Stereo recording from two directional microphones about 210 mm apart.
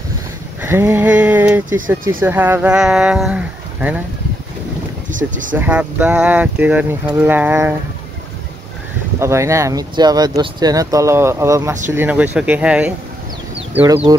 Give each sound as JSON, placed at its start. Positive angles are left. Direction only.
{"t": 0.6, "sound": "speech", "side_deg": -10}
{"t": 5.1, "sound": "speech", "side_deg": -40}
{"t": 5.5, "sound": "speech", "side_deg": -5}
{"t": 9.2, "sound": "speech", "side_deg": -15}